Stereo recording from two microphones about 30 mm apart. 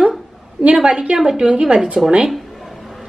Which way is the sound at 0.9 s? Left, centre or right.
Right.